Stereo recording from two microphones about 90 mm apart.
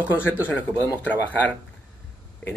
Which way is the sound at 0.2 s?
20° left (ahead or behind).